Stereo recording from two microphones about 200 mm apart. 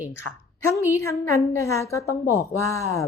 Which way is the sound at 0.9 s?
15° left (ahead or behind).